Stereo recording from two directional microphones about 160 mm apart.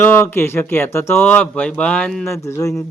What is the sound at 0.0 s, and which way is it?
A man's voice, 15° left (ahead or behind).